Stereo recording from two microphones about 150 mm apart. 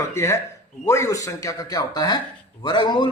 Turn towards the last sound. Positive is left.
turn(degrees=30)  # may be behind; listen again after turning